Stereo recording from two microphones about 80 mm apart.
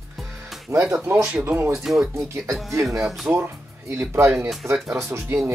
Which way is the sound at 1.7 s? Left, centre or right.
Centre.